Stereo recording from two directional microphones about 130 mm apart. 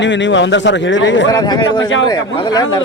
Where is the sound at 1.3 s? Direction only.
35° left (ahead or behind).